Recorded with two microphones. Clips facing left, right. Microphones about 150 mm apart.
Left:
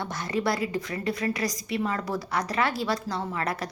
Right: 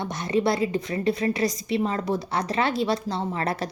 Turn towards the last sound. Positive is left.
turn(degrees=-30)  # may be behind; listen again after turning